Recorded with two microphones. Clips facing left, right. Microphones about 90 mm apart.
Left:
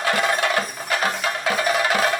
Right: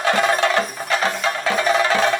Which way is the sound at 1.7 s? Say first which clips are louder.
Right 4 dB; 30° right (ahead or behind).